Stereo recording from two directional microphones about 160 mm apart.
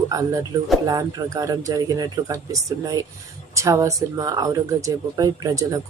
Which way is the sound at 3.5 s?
20° right (ahead or behind).